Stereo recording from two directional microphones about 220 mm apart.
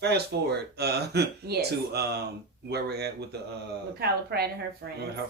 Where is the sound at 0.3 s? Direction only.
45° right (ahead or behind).